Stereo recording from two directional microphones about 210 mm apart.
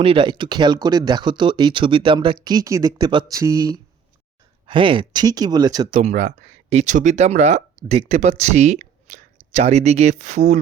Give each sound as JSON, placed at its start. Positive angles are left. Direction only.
{"t": 0.0, "sound": "speech", "side_deg": -25}
{"t": 6.0, "sound": "speech", "side_deg": -35}